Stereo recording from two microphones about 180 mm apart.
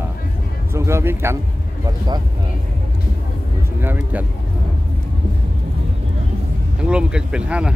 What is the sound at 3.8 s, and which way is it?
Speech, 10° right (ahead or behind).